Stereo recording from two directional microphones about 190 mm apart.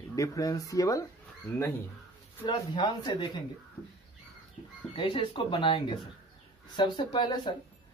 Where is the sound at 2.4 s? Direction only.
25° left (ahead or behind).